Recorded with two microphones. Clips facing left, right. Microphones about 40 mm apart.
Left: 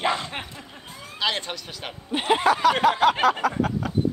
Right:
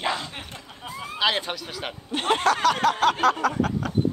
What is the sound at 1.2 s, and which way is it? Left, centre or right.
Speech, centre.